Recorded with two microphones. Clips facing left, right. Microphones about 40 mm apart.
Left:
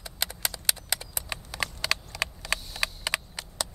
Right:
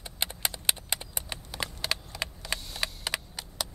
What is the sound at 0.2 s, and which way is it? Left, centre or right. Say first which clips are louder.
Clip-clop: even; right.